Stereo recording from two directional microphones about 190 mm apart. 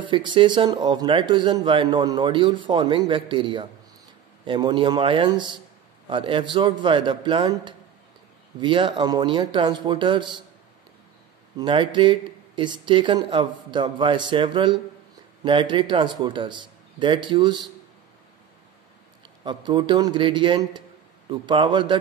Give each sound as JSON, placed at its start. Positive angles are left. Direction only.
{"t": 0.0, "sound": "speech", "side_deg": -25}
{"t": 11.5, "sound": "speech", "side_deg": -25}
{"t": 19.4, "sound": "speech", "side_deg": -25}